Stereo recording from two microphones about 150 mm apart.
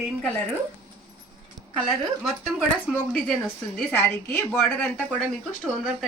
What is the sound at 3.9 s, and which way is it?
A woman's voice, 15° left (ahead or behind).